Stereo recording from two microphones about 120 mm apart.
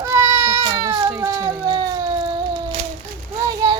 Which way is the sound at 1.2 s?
25° right (ahead or behind).